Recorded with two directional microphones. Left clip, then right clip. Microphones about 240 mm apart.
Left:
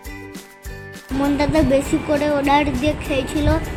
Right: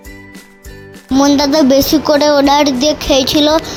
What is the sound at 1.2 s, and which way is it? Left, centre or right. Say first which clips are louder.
A child's voice: right 8 dB; right.